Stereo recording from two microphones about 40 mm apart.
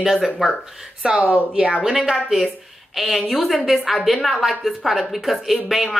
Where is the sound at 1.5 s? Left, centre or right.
Right.